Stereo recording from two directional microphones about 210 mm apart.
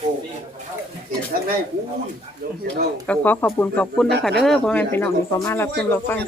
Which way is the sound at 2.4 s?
45° right (ahead or behind).